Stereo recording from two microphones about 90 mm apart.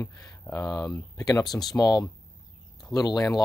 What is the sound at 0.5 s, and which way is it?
Speech, 45° left (ahead or behind).